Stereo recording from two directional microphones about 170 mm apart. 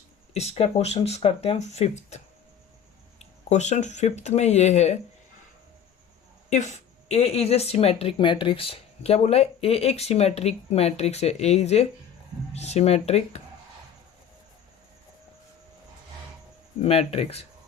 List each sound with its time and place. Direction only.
0.3 s speech: 40° left (ahead or behind)
6.5 s speech: 40° left (ahead or behind)
16.8 s speech: 35° left (ahead or behind)